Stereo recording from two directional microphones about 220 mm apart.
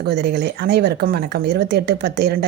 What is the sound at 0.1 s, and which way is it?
Speech, 50° right (ahead or behind).